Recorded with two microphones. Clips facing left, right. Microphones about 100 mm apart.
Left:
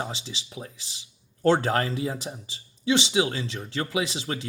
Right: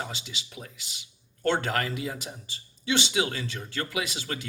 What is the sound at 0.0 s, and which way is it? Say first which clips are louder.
Speech: left 3 dB; 30° left (ahead or behind).